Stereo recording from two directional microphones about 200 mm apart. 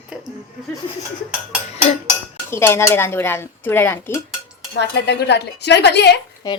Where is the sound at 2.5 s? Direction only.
10° left (ahead or behind).